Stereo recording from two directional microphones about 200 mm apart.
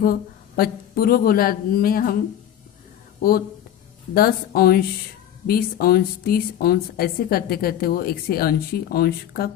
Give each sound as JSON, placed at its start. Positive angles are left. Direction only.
{"t": 0.0, "sound": "a woman's voice", "side_deg": 50}
{"t": 4.1, "sound": "a woman's voice", "side_deg": 50}